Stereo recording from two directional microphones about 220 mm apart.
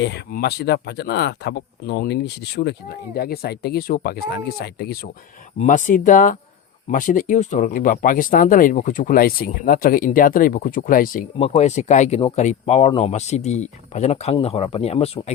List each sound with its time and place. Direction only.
0.0 s speech: 50° left (ahead or behind); by 15.3 s 25° left (ahead or behind)